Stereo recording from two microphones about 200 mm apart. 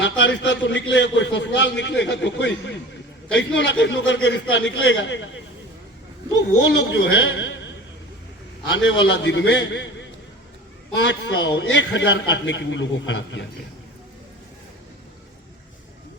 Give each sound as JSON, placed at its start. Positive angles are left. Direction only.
{"t": 0.0, "sound": "a man's voice", "side_deg": 65}
{"t": 6.3, "sound": "a man's voice", "side_deg": 65}
{"t": 8.8, "sound": "a man's voice", "side_deg": 70}